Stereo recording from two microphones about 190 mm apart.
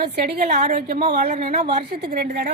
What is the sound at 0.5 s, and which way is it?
A woman's voice, 40° right (ahead or behind).